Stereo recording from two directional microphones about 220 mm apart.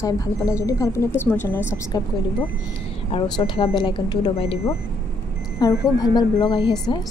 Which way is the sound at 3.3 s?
20° left (ahead or behind).